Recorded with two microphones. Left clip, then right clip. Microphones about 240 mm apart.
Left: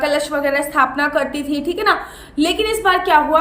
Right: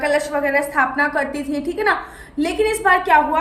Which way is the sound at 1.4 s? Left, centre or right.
Centre.